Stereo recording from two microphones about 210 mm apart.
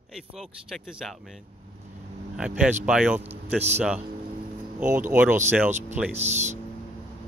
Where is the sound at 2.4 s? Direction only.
5° right (ahead or behind).